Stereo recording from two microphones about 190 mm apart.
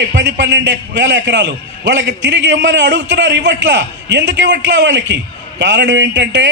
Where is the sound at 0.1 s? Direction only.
65° right (ahead or behind).